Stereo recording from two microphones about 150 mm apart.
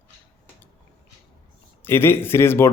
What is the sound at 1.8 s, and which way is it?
Speech, 15° left (ahead or behind).